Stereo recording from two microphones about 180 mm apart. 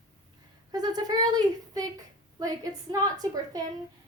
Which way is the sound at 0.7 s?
20° right (ahead or behind).